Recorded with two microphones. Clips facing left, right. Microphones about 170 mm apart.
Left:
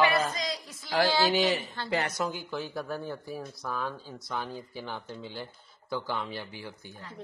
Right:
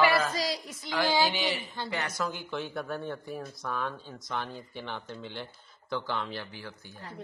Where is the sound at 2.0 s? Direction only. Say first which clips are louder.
Left 3 dB; 25° left (ahead or behind).